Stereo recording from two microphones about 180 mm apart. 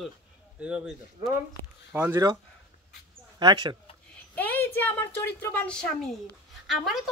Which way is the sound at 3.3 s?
25° right (ahead or behind).